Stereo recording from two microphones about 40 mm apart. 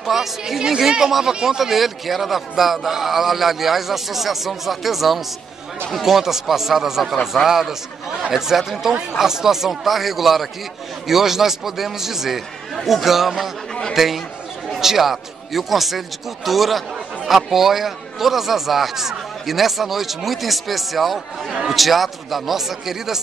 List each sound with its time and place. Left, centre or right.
0.0 s a man's voice: centre
1.6 s a man's voice: centre